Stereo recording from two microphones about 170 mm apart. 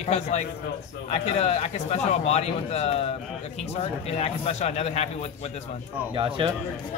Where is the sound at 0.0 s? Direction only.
40° left (ahead or behind).